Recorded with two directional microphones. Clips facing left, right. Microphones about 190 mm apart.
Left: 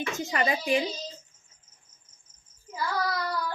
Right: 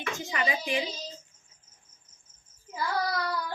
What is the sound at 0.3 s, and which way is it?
Speech, 45° left (ahead or behind).